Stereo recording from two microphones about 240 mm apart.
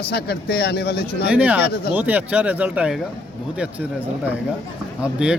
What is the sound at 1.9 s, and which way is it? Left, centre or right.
Speech, centre.